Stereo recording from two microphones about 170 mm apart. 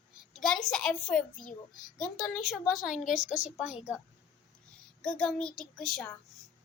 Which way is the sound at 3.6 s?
5° right (ahead or behind).